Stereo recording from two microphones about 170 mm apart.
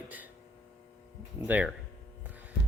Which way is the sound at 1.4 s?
10° right (ahead or behind).